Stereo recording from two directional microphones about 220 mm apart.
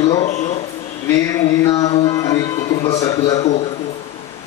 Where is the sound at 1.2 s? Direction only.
15° left (ahead or behind).